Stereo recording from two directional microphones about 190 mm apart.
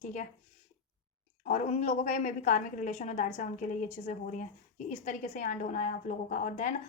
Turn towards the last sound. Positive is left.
turn(degrees=40)  # may be behind; listen again after turning